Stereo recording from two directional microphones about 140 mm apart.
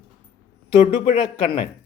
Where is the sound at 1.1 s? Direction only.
40° left (ahead or behind).